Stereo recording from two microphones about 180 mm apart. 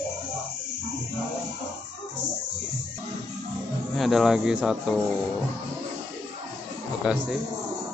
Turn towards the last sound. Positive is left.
turn(degrees=-5)  # may be behind; listen again after turning